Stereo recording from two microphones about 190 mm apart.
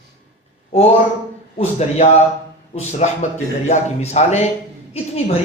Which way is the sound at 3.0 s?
35° left (ahead or behind).